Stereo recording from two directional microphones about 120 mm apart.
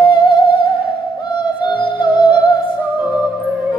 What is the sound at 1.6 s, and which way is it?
Music, 40° left (ahead or behind).